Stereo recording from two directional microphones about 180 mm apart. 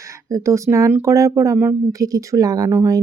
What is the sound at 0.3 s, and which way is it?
Speech, 15° right (ahead or behind).